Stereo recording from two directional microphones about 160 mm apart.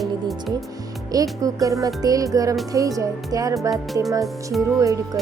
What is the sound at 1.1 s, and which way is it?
Speech, 20° right (ahead or behind).